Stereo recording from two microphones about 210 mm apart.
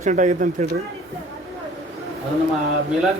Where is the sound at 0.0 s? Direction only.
35° right (ahead or behind).